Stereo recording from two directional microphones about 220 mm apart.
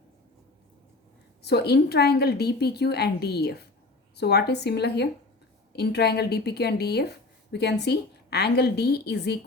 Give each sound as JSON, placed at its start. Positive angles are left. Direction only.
{"t": 1.4, "sound": "a woman's voice", "side_deg": 50}